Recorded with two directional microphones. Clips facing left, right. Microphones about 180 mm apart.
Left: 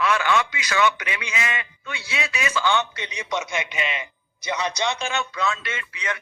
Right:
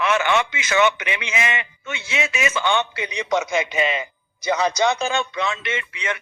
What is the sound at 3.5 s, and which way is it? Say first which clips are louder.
A man's voice: right 6 dB; 35° right (ahead or behind).